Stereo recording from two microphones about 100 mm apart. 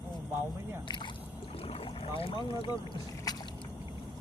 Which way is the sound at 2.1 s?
60° left (ahead or behind).